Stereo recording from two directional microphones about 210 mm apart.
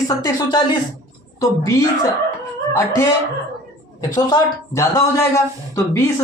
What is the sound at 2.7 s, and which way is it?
Speech, 15° left (ahead or behind).